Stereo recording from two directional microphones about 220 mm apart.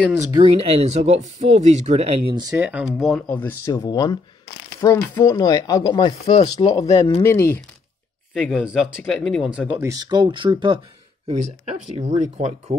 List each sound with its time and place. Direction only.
0.2 s speech: 20° right (ahead or behind)
2.5 s speech: 5° right (ahead or behind); by 6.4 s 30° left (ahead or behind)
6.5 s speech: 20° left (ahead or behind)
8.4 s speech: 5° right (ahead or behind); by 12.7 s 30° right (ahead or behind)